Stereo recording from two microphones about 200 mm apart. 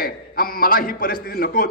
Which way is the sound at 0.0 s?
45° left (ahead or behind).